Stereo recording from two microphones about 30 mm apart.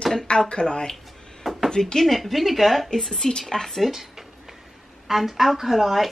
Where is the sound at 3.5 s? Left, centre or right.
Centre.